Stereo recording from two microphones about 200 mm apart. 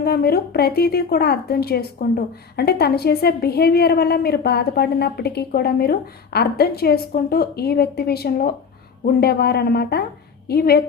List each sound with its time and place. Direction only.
0.0 s a woman's voice: 50° left (ahead or behind)